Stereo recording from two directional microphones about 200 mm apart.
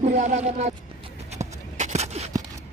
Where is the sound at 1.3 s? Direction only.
35° right (ahead or behind).